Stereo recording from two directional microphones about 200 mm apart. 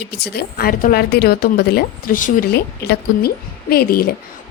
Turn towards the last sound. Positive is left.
turn(degrees=50)  # may be behind; listen again after turning